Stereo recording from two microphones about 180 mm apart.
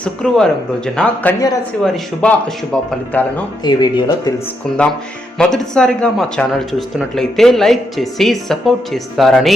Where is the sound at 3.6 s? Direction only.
25° left (ahead or behind).